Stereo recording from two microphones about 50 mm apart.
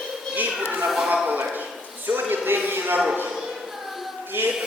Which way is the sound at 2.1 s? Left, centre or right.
Right.